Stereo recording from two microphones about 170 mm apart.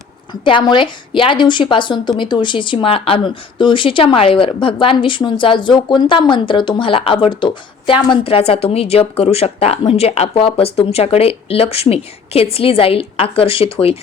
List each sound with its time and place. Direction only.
0.4 s a woman's voice: 30° left (ahead or behind)